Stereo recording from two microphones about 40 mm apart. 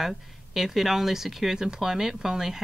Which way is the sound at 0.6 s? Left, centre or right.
Centre.